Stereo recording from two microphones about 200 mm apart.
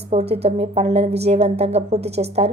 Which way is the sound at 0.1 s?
30° right (ahead or behind).